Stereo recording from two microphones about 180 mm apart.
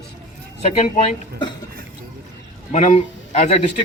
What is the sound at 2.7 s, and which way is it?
Speech, 40° left (ahead or behind).